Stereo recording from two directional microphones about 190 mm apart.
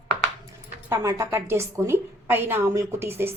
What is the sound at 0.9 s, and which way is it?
Speech, 15° right (ahead or behind).